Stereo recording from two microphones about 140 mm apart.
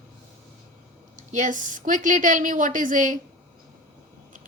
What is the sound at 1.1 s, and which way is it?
Speech, 60° right (ahead or behind).